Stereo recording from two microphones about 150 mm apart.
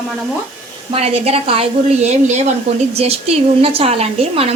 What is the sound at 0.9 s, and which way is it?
A woman's voice, 45° right (ahead or behind).